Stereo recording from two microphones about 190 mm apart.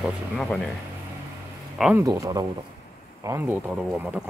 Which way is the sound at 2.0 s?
20° right (ahead or behind).